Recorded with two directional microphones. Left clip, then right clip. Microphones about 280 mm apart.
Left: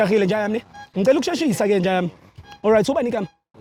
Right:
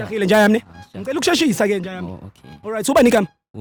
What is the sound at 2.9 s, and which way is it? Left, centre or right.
Speech, right.